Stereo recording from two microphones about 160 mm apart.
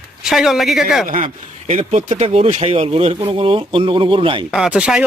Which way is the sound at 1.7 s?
35° right (ahead or behind).